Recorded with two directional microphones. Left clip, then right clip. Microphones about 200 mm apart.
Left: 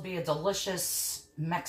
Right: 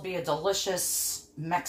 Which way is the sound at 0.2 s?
40° right (ahead or behind).